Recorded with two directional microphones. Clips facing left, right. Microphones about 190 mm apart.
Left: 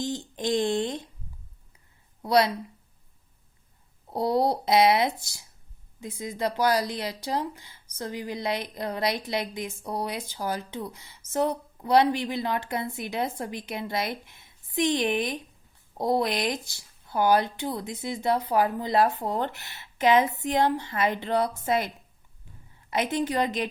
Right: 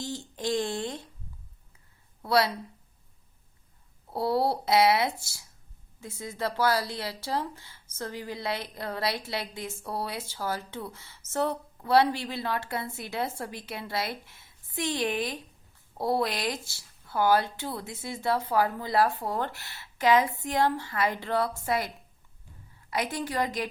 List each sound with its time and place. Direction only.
0.0 s a sound: 20° left (ahead or behind)
2.2 s speech: 20° left (ahead or behind)
4.1 s speech: 20° left (ahead or behind)